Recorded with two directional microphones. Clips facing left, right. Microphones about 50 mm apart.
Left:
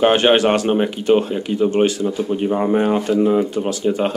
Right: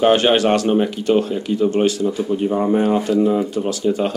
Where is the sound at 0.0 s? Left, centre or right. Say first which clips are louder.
Left 1 dB; left.